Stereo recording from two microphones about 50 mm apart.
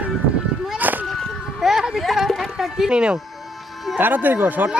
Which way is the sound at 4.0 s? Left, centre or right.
Right.